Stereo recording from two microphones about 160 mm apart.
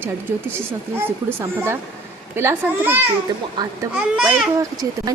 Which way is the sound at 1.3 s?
15° right (ahead or behind).